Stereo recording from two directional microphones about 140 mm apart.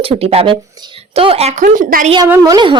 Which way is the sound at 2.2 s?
20° right (ahead or behind).